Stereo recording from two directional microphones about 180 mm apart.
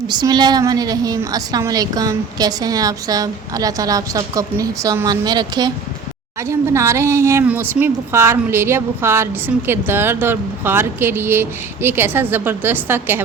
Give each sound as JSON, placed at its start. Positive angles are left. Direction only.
{"t": 0.1, "sound": "a woman's voice", "side_deg": -25}